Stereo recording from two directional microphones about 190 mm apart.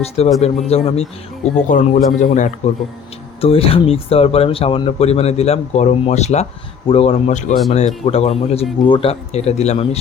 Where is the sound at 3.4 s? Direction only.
30° left (ahead or behind).